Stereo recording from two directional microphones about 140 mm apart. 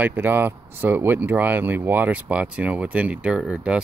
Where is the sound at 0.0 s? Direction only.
15° right (ahead or behind).